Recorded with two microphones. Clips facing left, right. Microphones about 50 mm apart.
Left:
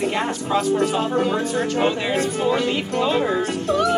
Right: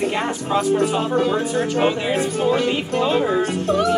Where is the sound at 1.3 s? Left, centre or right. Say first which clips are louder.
Right 1 dB; right.